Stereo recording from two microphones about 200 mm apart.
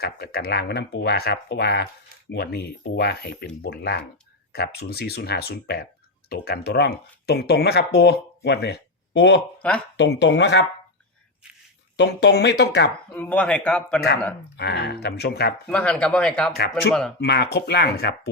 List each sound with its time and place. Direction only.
0.0 s speech: 50° left (ahead or behind)
9.6 s speech: 5° left (ahead or behind)
10.0 s speech: 60° left (ahead or behind)
11.9 s speech: 60° left (ahead or behind)
13.1 s speech: 5° left (ahead or behind)
14.5 s speech: 55° left (ahead or behind)
15.7 s speech: 5° left (ahead or behind)
16.6 s speech: 55° left (ahead or behind)